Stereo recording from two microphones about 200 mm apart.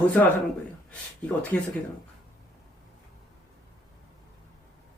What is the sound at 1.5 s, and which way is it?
Speech, 10° left (ahead or behind).